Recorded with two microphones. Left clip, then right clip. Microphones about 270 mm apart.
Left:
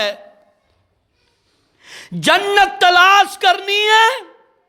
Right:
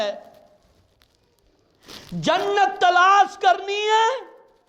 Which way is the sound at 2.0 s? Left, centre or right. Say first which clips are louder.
Left 7 dB; left.